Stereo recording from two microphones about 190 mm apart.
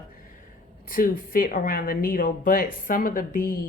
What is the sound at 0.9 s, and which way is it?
Speech, 45° left (ahead or behind).